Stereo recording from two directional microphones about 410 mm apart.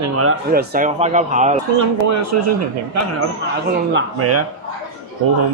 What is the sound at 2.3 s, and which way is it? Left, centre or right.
Speech, right.